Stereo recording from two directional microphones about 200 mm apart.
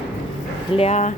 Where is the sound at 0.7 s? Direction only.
30° left (ahead or behind).